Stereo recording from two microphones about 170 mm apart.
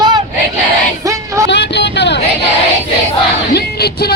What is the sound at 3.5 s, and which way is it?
Music, 70° left (ahead or behind).